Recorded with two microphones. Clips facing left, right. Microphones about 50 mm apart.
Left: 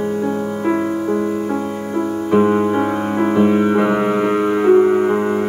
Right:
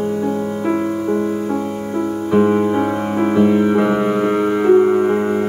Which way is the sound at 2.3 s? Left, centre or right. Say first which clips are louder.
Even; centre.